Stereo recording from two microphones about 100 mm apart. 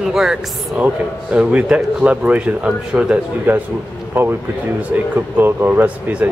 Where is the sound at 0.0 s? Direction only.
5° right (ahead or behind).